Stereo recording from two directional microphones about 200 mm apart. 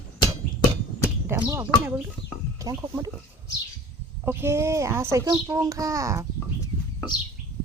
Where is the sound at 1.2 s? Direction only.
10° right (ahead or behind).